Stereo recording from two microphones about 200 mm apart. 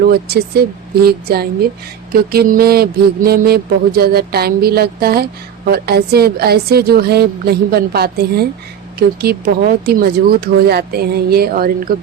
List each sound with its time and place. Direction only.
0.0 s mantra: 50° right (ahead or behind)